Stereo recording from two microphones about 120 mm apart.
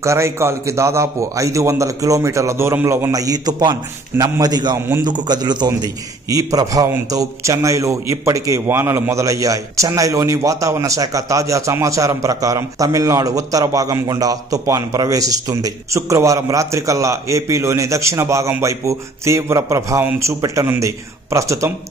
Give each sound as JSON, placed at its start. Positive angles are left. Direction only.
{"t": 0.0, "sound": "a man's voice", "side_deg": -25}